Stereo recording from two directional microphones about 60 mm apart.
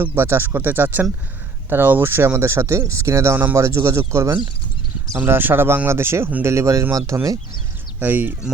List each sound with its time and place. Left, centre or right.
0.0 s speech: right
5.2 s speech: right
7.9 s speech: right